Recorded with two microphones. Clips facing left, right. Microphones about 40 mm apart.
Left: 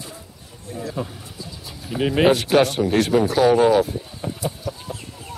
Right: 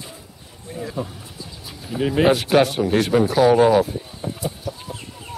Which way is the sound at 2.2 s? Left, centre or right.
Centre.